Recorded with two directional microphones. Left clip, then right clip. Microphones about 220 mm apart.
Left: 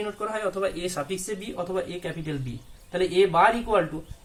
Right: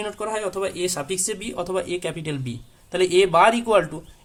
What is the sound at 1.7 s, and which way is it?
Speech, 45° right (ahead or behind).